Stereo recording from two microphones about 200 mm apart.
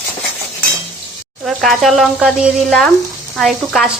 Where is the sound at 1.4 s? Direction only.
Centre (ahead or behind).